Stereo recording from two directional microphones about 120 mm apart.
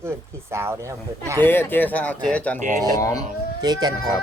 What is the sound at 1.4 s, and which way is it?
Speech, 15° left (ahead or behind).